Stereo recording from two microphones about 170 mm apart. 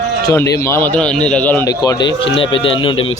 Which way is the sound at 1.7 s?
25° left (ahead or behind).